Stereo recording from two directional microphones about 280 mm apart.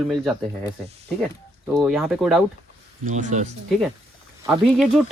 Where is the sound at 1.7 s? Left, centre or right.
Centre.